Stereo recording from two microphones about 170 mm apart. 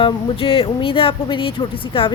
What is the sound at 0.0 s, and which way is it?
A woman's voice, 30° left (ahead or behind).